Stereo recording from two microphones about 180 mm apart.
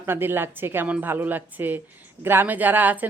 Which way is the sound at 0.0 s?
10° right (ahead or behind).